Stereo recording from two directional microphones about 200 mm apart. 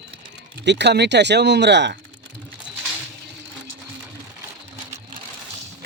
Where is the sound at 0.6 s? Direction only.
60° right (ahead or behind).